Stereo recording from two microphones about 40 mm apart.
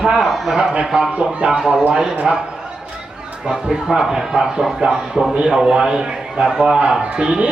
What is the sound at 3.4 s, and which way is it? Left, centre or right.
A man's voice, centre.